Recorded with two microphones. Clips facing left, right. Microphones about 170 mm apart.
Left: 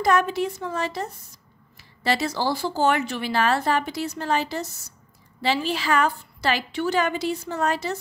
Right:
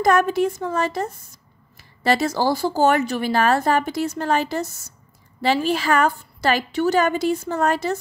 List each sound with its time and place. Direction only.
0.0 s speech: 50° right (ahead or behind)